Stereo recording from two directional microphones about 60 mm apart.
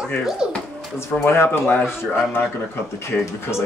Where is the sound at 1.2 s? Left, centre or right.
Left.